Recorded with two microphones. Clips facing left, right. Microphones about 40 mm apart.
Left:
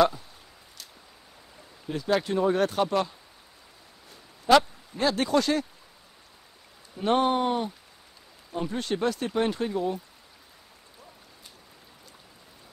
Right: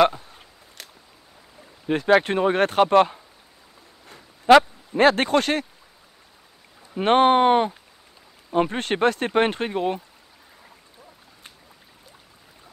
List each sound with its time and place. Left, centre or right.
0.8 s a sound: right
1.9 s speech: right
7.0 s speech: right